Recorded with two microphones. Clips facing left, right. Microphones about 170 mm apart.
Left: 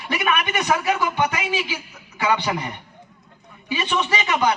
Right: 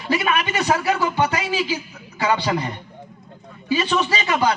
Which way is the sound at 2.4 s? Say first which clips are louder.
Right 3 dB; 30° right (ahead or behind).